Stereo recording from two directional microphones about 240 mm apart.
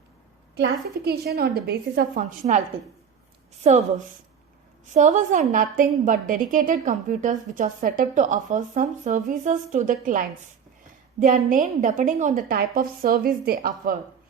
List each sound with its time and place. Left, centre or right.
0.5 s a woman's voice: right
3.6 s a woman's voice: right
4.9 s a woman's voice: right